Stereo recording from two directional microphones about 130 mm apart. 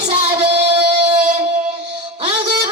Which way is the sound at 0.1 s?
40° right (ahead or behind).